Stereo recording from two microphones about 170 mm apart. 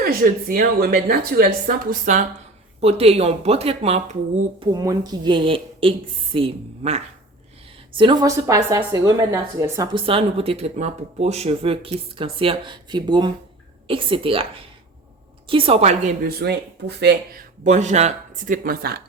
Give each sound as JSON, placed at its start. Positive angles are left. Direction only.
{"t": 0.0, "sound": "a woman's voice", "side_deg": -60}
{"t": 2.8, "sound": "speech", "side_deg": -35}
{"t": 4.7, "sound": "a woman's voice", "side_deg": -20}
{"t": 9.9, "sound": "speech", "side_deg": -30}
{"t": 16.2, "sound": "speech", "side_deg": -70}
{"t": 17.6, "sound": "speech", "side_deg": -45}